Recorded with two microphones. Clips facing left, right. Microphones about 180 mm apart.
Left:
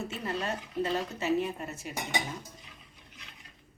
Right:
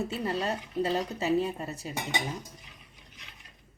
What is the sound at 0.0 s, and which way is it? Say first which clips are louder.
A woman's voice: right 4 dB; 30° right (ahead or behind).